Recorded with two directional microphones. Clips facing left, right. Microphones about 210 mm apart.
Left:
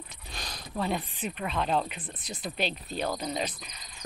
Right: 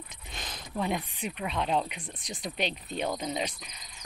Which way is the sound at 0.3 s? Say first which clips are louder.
Even; 20° right (ahead or behind).